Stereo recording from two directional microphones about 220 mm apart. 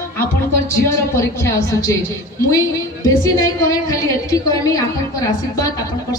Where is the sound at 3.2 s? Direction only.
15° left (ahead or behind).